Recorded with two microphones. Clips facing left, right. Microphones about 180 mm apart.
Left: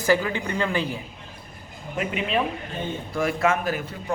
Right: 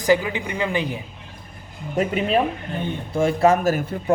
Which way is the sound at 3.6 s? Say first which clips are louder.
Right 7 dB; 50° right (ahead or behind).